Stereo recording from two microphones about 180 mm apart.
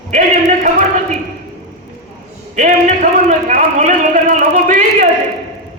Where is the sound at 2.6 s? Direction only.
45° right (ahead or behind).